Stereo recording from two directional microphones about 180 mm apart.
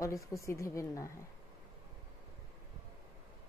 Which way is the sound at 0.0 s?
15° left (ahead or behind).